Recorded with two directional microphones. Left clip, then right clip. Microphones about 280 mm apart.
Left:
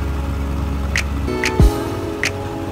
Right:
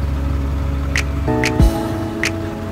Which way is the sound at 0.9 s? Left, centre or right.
Centre.